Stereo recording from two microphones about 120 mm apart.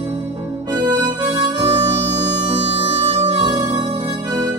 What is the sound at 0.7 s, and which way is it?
Harmonica, 35° right (ahead or behind).